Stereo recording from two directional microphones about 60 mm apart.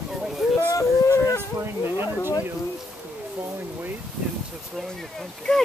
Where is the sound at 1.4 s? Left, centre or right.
Right.